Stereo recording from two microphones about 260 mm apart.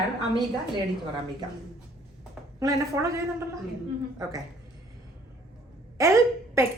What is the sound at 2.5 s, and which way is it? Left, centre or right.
Speech, centre.